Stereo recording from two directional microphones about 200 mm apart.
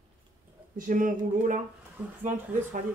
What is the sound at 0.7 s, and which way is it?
Speech, 40° right (ahead or behind).